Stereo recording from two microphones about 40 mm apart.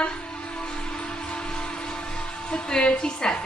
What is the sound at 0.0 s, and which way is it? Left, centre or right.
Music, left.